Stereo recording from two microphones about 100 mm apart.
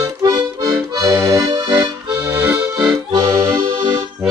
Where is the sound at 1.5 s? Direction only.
45° right (ahead or behind).